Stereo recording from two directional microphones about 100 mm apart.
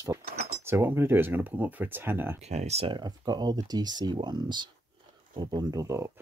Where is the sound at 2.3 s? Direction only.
90° right.